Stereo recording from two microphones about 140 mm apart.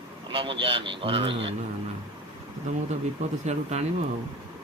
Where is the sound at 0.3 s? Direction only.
40° right (ahead or behind).